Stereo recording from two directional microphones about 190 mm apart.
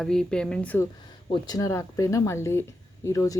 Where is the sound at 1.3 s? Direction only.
20° left (ahead or behind).